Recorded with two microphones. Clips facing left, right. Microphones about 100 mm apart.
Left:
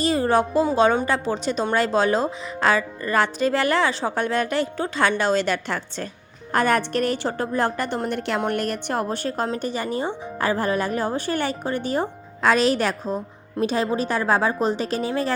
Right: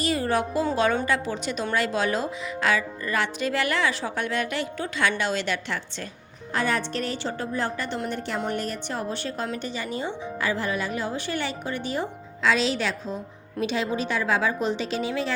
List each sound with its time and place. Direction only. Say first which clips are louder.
0.0 s music: left 5 dB; 30° left (ahead or behind)
0.8 s speech: left 3 dB; 25° left (ahead or behind); by 8.2 s 50° left (ahead or behind)
8.4 s a woman's voice: left 4 dB; 60° left (ahead or behind); by 15.3 s 45° left (ahead or behind)